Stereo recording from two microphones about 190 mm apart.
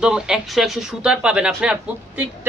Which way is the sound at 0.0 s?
5° right (ahead or behind).